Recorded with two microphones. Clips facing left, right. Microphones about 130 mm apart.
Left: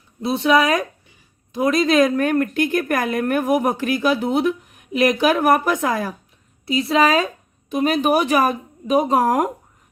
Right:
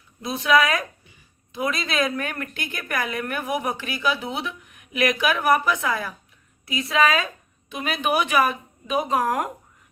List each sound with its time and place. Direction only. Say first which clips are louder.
0.2 s a woman's voice: left 3 dB; 30° left (ahead or behind)
6.7 s speech: left 4 dB; 30° left (ahead or behind)